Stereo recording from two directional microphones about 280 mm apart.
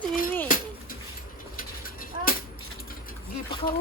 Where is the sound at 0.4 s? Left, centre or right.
Left.